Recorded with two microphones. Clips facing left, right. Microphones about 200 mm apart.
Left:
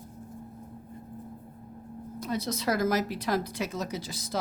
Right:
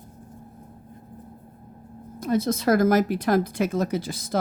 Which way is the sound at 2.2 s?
50° right (ahead or behind).